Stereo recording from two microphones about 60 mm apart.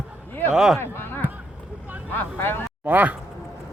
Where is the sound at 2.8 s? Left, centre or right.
Right.